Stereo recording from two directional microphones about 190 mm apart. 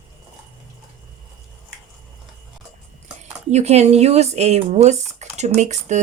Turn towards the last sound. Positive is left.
turn(degrees=-40)  # may be behind; listen again after turning